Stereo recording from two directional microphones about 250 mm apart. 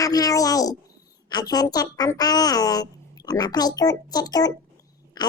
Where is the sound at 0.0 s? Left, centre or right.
Centre.